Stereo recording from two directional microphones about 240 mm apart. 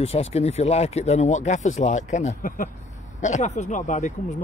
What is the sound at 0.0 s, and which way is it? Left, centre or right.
Speech, left.